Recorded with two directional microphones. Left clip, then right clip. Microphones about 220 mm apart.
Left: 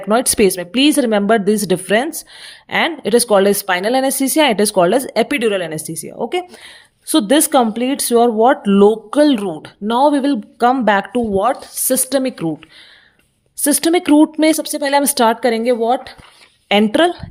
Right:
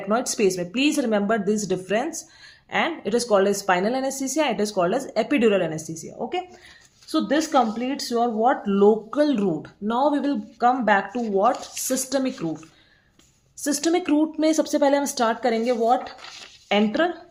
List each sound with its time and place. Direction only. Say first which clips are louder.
0.1 s speech: left 8 dB; 45° left (ahead or behind)
13.6 s speech: left 8 dB; 40° left (ahead or behind)